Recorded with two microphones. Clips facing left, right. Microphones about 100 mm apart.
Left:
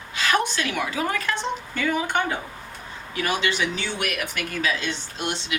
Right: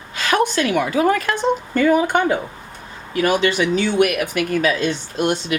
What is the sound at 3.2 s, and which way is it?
Speech, 45° right (ahead or behind).